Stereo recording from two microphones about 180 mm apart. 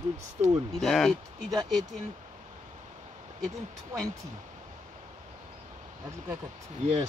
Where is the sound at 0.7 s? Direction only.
Centre (ahead or behind).